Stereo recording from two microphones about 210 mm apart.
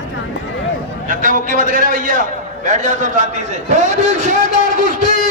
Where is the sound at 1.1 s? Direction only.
40° right (ahead or behind).